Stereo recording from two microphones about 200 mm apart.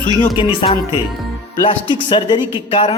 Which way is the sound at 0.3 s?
25° left (ahead or behind).